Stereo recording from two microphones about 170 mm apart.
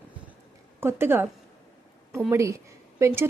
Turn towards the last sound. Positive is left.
turn(degrees=-15)  # may be behind; listen again after turning